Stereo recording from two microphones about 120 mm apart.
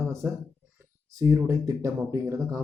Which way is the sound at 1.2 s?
25° right (ahead or behind).